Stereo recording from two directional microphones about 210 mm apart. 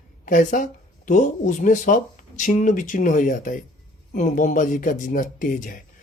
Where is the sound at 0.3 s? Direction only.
40° left (ahead or behind).